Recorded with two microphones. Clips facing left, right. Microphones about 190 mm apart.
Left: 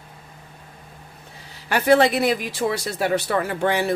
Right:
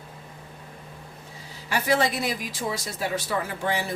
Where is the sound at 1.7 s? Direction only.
65° left (ahead or behind).